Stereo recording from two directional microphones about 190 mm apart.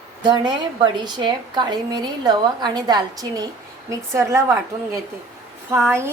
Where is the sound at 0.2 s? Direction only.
25° right (ahead or behind).